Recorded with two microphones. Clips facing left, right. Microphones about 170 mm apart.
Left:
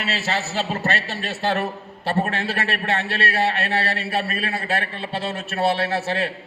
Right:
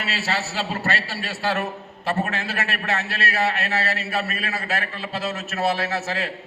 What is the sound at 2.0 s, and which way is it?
A man's voice, 35° left (ahead or behind).